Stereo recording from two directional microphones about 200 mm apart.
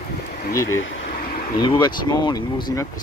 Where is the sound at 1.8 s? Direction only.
20° left (ahead or behind).